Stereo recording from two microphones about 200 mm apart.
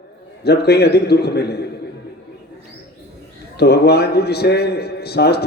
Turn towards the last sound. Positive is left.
turn(degrees=55)  # may be behind; listen again after turning